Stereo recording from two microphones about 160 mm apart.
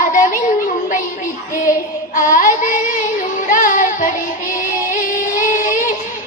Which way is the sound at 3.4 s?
55° left (ahead or behind).